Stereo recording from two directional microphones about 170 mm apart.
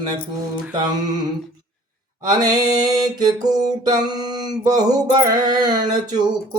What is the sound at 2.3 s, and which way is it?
Mantra, 25° right (ahead or behind).